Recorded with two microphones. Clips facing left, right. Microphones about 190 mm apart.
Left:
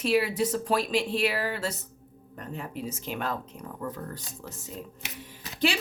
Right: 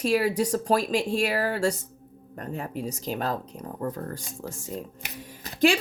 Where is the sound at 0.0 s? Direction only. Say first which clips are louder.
Right 2 dB; 45° right (ahead or behind).